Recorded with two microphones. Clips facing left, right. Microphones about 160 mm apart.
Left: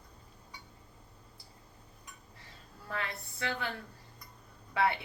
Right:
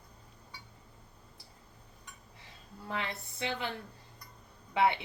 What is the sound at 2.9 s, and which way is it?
Speech, 20° right (ahead or behind).